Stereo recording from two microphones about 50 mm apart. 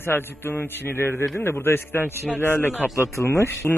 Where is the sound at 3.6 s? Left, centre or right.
Centre.